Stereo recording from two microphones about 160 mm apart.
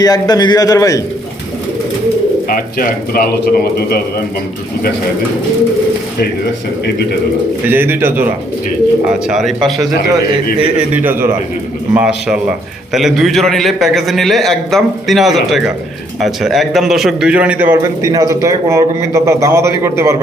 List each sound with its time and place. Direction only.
0.0 s a man's voice: 25° left (ahead or behind)
2.5 s speech: 60° left (ahead or behind)
7.6 s a man's voice: 10° right (ahead or behind)
10.8 s a man's voice: 10° right (ahead or behind)